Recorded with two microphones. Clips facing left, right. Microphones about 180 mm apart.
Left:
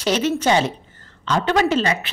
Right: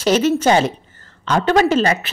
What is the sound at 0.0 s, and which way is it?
A woman's voice, 45° right (ahead or behind).